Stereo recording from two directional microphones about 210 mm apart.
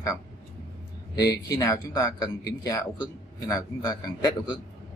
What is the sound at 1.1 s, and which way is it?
Speech, 15° left (ahead or behind).